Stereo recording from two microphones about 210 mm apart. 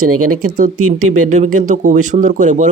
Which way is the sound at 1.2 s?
35° right (ahead or behind).